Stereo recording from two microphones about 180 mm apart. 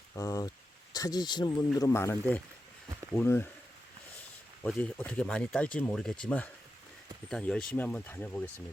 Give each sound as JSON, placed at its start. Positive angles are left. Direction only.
{"t": 0.1, "sound": "a sound", "side_deg": 20}
{"t": 0.9, "sound": "speech", "side_deg": 20}
{"t": 4.6, "sound": "speech", "side_deg": 5}